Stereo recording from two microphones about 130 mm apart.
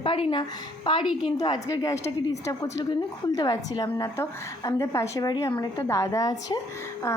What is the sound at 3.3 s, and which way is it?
A woman's voice, 30° left (ahead or behind).